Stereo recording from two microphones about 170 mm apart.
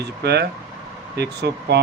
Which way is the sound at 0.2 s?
75° right (ahead or behind).